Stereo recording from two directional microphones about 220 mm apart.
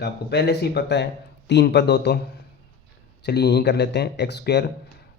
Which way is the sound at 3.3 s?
50° left (ahead or behind).